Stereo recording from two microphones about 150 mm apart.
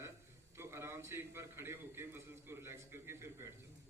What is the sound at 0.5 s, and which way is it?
A man's voice, 15° right (ahead or behind).